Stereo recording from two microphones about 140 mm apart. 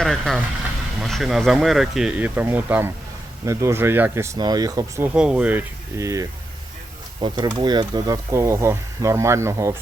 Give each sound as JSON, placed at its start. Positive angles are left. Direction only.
{"t": 0.0, "sound": "speech", "side_deg": 5}
{"t": 5.0, "sound": "speech", "side_deg": -5}
{"t": 6.0, "sound": "speech", "side_deg": -25}